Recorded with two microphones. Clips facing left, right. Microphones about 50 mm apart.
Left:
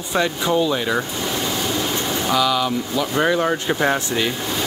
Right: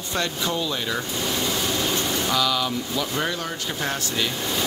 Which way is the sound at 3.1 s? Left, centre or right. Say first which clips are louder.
Left 8 dB; left.